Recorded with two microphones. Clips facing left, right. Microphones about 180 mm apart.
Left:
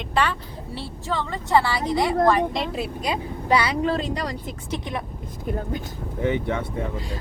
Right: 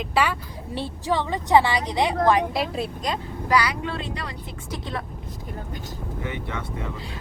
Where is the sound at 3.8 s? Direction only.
40° left (ahead or behind).